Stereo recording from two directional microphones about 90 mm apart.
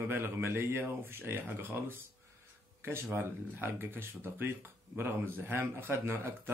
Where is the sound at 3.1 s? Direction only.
20° right (ahead or behind).